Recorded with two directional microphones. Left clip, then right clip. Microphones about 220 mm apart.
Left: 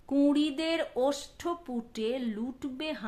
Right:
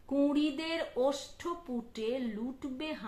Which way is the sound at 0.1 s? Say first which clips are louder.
Left 3 dB; 45° left (ahead or behind).